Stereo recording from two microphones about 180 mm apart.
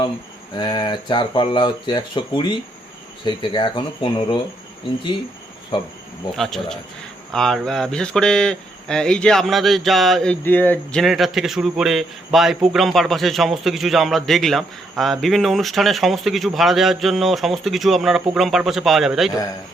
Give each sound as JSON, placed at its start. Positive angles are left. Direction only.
{"t": 0.5, "sound": "speech", "side_deg": 25}
{"t": 5.7, "sound": "speech", "side_deg": 25}
{"t": 6.3, "sound": "a man's voice", "side_deg": 0}